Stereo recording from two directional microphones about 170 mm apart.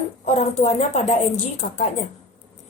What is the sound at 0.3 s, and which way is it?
A woman's voice, 40° left (ahead or behind).